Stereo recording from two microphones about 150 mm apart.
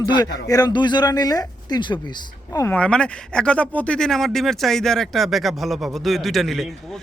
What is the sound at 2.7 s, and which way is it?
Speech, 5° left (ahead or behind).